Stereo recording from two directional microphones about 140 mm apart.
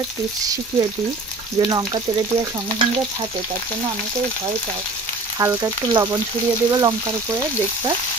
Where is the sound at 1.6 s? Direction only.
30° right (ahead or behind).